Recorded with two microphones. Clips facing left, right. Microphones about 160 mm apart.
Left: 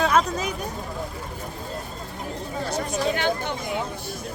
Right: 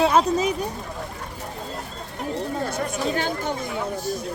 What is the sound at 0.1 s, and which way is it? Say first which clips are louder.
Speech: right 3 dB; 30° right (ahead or behind).